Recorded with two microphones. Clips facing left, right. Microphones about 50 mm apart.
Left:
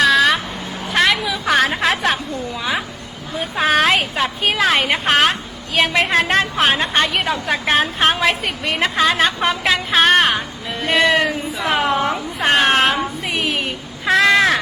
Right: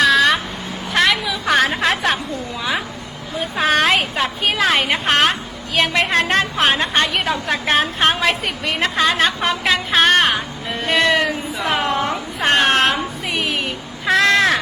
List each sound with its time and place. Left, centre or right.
0.0 s a sound: centre
0.9 s music: centre
3.5 s a woman's voice: centre